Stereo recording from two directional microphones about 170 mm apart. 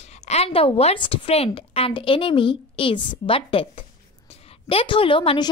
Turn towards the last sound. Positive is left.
turn(degrees=30)  # may be behind; listen again after turning